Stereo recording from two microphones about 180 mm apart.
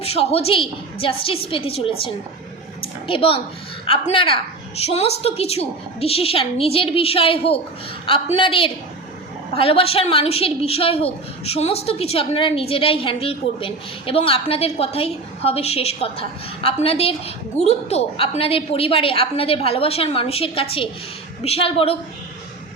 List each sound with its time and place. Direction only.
0.0 s a woman's voice: 35° left (ahead or behind)